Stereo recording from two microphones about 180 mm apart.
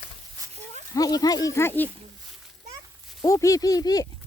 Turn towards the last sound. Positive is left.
turn(degrees=20)  # may be behind; listen again after turning